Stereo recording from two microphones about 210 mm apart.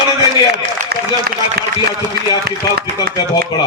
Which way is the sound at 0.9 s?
50° right (ahead or behind).